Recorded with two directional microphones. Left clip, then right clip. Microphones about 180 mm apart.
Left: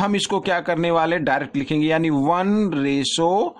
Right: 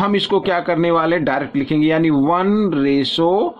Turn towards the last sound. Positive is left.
turn(degrees=45)  # may be behind; listen again after turning